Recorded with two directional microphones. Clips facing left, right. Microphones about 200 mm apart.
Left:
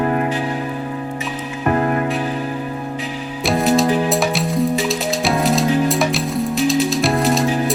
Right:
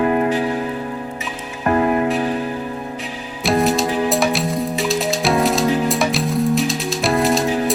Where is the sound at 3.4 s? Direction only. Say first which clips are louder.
Left 1 dB; centre (ahead or behind).